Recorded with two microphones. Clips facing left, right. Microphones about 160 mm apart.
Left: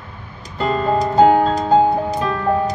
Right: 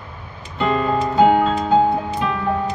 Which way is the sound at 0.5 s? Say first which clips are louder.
Left 1 dB; 35° left (ahead or behind).